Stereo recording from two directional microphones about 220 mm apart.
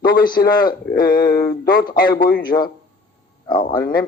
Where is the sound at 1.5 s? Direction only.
20° left (ahead or behind).